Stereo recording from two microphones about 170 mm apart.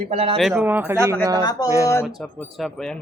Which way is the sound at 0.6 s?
10° right (ahead or behind).